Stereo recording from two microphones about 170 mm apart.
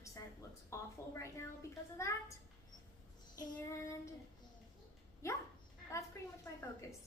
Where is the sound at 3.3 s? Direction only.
15° left (ahead or behind).